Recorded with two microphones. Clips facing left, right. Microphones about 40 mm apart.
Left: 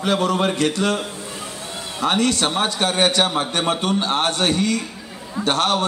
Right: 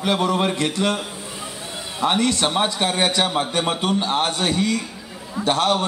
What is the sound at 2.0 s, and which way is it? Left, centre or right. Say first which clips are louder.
A man's voice: even; centre.